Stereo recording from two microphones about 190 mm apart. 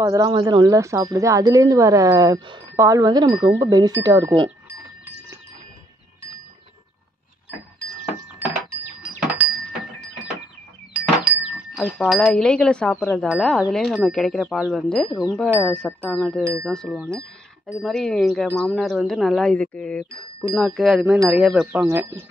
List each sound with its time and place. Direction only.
0.0 s speech: 20° right (ahead or behind)
9.3 s a sound: 5° right (ahead or behind)
11.7 s speech: centre (ahead or behind)
21.8 s speech: 10° right (ahead or behind)